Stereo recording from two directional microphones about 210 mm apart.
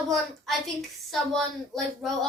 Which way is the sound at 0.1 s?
Centre (ahead or behind).